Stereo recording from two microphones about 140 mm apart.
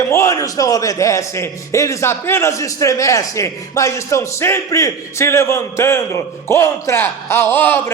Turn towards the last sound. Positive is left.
turn(degrees=15)  # may be behind; listen again after turning